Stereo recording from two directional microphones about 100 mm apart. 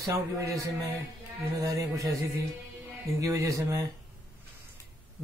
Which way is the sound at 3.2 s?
30° right (ahead or behind).